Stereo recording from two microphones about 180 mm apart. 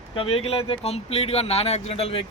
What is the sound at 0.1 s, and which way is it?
Speech, 30° left (ahead or behind).